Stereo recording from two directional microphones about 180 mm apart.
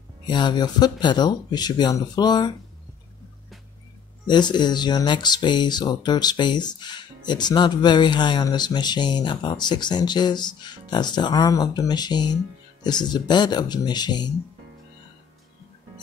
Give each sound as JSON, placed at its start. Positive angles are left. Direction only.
{"t": 0.3, "sound": "speech", "side_deg": 25}
{"t": 4.3, "sound": "speech", "side_deg": 25}